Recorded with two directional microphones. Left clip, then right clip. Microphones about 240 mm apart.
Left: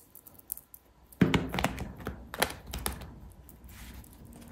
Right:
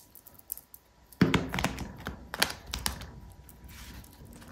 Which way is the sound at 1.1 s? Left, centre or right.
Centre.